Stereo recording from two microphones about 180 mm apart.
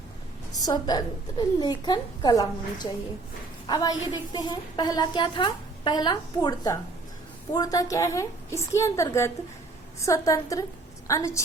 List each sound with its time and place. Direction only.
0.6 s a woman's voice: 20° left (ahead or behind)